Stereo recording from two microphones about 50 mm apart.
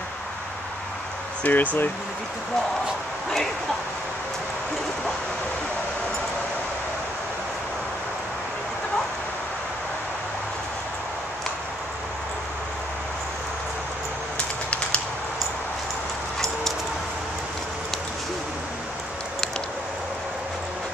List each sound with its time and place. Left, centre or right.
1.4 s speech: left